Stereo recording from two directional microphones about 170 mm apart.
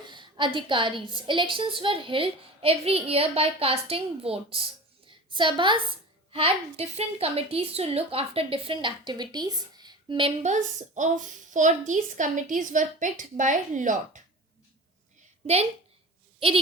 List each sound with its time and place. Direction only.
0.0 s a woman's voice: 25° right (ahead or behind)
10.4 s a woman's voice: 45° right (ahead or behind)